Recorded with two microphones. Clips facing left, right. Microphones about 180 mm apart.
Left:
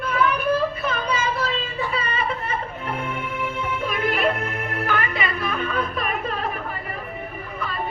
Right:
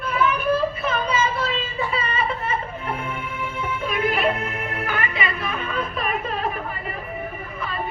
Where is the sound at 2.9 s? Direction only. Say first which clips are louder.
Left 2 dB; 35° left (ahead or behind).